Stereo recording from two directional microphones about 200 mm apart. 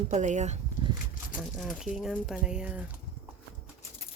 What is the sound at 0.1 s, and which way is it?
Speech, 35° right (ahead or behind).